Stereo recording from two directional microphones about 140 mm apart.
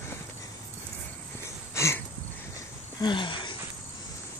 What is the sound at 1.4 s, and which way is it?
Wheeze, 20° left (ahead or behind).